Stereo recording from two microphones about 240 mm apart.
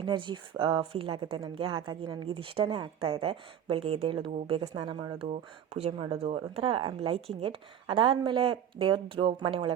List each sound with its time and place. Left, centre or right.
0.0 s speech: centre